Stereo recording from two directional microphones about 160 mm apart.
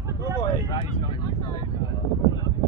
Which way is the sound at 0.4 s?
30° left (ahead or behind).